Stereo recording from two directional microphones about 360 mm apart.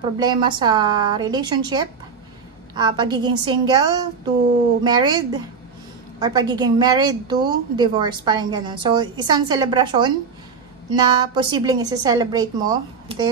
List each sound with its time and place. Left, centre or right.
0.2 s a woman's voice: centre
4.8 s a woman's voice: centre